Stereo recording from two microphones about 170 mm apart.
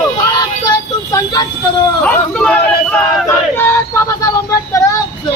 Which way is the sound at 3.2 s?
15° left (ahead or behind).